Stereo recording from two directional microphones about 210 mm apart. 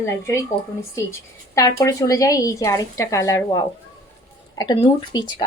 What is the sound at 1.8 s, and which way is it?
A woman's voice, 15° left (ahead or behind).